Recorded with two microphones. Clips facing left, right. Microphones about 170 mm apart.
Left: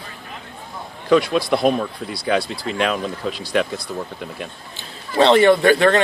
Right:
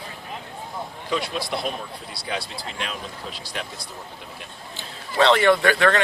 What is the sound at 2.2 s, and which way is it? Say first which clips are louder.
Speech: left 10 dB; 70° left (ahead or behind).